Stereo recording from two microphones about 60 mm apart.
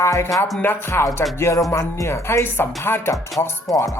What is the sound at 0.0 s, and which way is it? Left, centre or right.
Speech, left.